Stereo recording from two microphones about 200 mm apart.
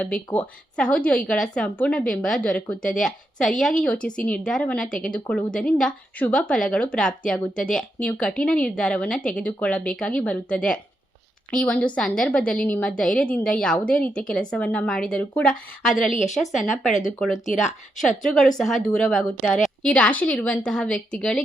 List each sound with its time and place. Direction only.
0.0 s a woman's voice: 5° left (ahead or behind)